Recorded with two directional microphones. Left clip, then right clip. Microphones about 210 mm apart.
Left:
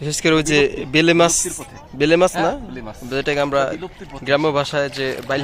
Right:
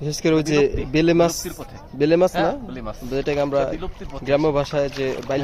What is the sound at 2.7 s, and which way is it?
Speech, 20° right (ahead or behind).